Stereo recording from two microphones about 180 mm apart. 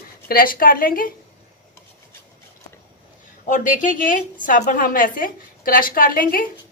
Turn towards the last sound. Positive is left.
turn(degrees=50)  # may be behind; listen again after turning